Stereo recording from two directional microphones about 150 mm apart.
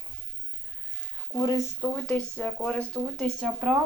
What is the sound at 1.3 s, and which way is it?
Speech, 25° left (ahead or behind).